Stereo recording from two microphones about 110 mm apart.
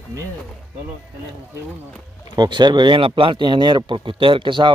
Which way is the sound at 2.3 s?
45° right (ahead or behind).